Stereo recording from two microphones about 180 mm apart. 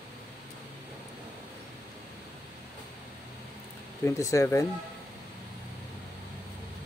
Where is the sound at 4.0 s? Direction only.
15° left (ahead or behind).